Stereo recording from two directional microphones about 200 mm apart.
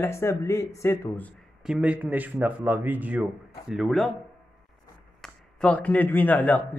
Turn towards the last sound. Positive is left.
turn(degrees=10)  # may be behind; listen again after turning